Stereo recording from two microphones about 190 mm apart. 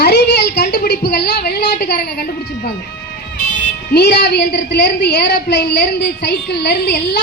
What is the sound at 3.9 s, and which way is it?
A woman's voice, 60° left (ahead or behind).